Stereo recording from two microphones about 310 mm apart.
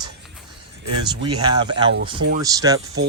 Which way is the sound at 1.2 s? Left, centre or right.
Centre.